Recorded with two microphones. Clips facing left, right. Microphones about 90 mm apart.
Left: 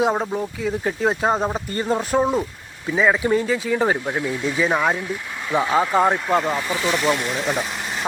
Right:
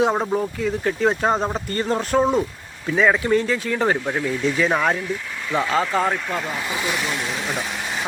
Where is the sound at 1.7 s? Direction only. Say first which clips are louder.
Right 1 dB; 15° left (ahead or behind).